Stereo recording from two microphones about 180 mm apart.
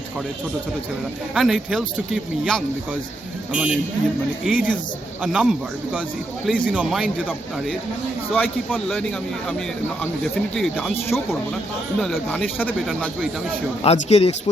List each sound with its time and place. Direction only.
1.3 s speech: centre (ahead or behind)
11.9 s speech: 5° left (ahead or behind)
13.8 s speech: 35° left (ahead or behind)